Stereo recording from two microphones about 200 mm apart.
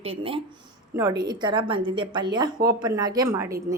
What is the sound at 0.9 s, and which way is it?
A woman's voice, 20° right (ahead or behind).